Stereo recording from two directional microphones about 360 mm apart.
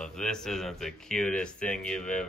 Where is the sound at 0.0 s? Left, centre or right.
Centre.